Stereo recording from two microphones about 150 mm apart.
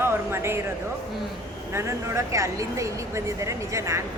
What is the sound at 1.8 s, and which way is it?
Speech, 20° right (ahead or behind).